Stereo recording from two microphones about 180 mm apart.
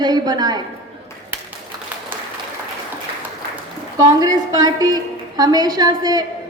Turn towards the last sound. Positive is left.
turn(degrees=-20)  # may be behind; listen again after turning